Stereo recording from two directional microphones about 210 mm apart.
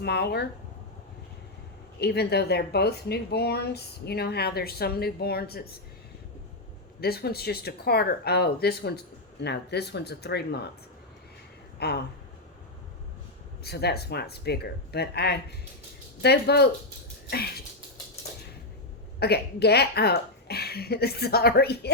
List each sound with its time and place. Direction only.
0.0 s speech: 50° left (ahead or behind)
2.0 s speech: 50° left (ahead or behind)
7.0 s speech: 50° left (ahead or behind)
11.8 s speech: 50° left (ahead or behind)
13.7 s speech: 50° left (ahead or behind)
17.2 s throat clearing: 50° left (ahead or behind)
19.2 s speech: 50° left (ahead or behind)